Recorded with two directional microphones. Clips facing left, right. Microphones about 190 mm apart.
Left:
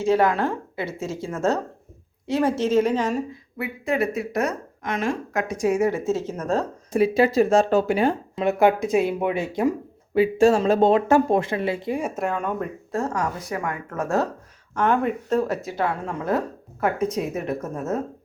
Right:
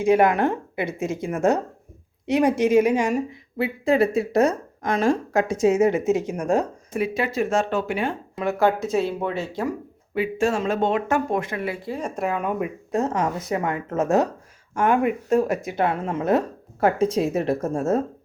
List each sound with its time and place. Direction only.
0.0 s speech: 15° right (ahead or behind)
3.6 s a woman's voice: 30° right (ahead or behind); by 6.7 s 15° right (ahead or behind)
6.9 s speech: 35° left (ahead or behind)
8.4 s speech: 20° left (ahead or behind)
10.2 s speech: 35° left (ahead or behind)
11.9 s a woman's voice: 5° left (ahead or behind); by 18.0 s 30° right (ahead or behind)